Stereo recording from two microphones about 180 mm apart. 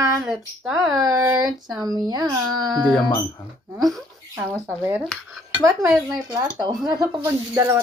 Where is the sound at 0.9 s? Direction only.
20° right (ahead or behind).